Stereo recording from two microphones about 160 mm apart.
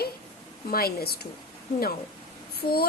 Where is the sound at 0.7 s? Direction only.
70° left (ahead or behind).